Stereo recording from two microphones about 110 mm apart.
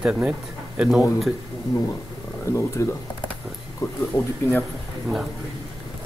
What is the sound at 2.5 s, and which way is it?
Speech, 25° left (ahead or behind).